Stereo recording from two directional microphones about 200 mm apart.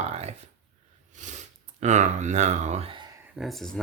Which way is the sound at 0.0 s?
30° right (ahead or behind).